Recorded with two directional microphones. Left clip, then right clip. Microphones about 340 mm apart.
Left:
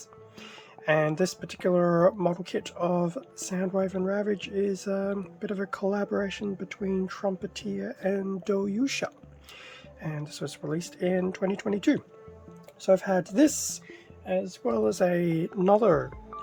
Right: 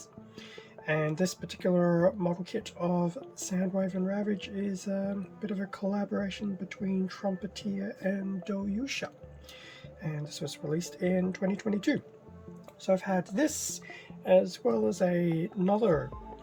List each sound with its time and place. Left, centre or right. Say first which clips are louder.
0.9 s speech: left 6 dB; centre
12.8 s speech: left 5 dB; left
14.3 s speech: right 5 dB; centre
14.7 s speech: left 8 dB; centre